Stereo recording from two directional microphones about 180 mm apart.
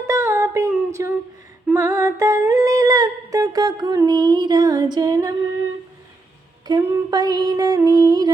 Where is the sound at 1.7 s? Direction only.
15° right (ahead or behind).